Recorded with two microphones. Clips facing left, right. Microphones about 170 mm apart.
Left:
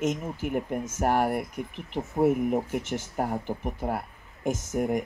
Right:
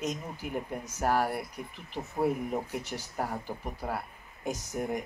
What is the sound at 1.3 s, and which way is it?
Speech, 50° left (ahead or behind).